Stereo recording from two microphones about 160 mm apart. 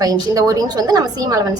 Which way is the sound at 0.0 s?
20° right (ahead or behind).